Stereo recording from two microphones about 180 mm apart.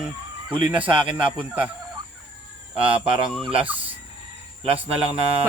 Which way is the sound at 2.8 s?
30° right (ahead or behind).